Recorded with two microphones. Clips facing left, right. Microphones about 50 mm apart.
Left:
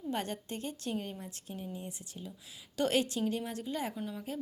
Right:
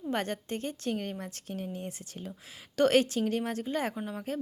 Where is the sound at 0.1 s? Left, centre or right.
Right.